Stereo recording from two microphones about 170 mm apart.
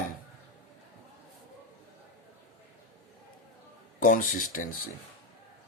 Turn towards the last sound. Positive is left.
turn(degrees=50)  # may be behind; listen again after turning